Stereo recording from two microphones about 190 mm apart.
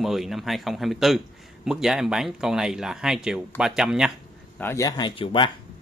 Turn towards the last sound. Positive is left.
turn(degrees=25)  # may be behind; listen again after turning